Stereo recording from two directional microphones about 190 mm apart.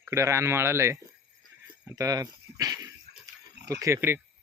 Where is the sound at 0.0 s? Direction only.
15° right (ahead or behind).